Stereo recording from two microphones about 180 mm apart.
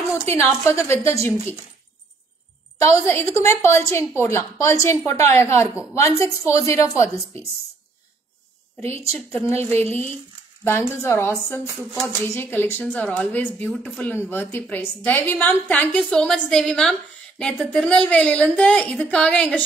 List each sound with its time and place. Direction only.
0.2 s a woman's voice: 15° left (ahead or behind)
2.8 s a woman's voice: 15° left (ahead or behind)
8.9 s a woman's voice: 35° right (ahead or behind)
9.3 s a woman's voice: 10° left (ahead or behind)
11.0 s a woman's voice: 15° left (ahead or behind)